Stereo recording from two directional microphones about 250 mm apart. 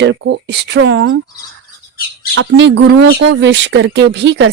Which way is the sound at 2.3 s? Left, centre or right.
Right.